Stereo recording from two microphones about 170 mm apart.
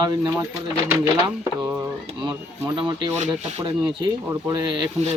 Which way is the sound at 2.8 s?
25° right (ahead or behind).